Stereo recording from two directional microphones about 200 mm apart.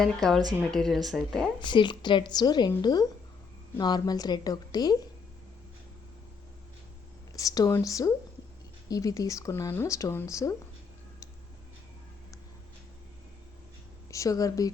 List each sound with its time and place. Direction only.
0.0 s speech: centre (ahead or behind)
1.6 s a woman's voice: 25° left (ahead or behind)
7.3 s speech: 15° left (ahead or behind)
14.1 s speech: 15° left (ahead or behind)